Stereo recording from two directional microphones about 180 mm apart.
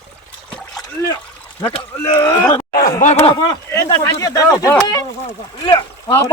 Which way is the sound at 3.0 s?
35° left (ahead or behind).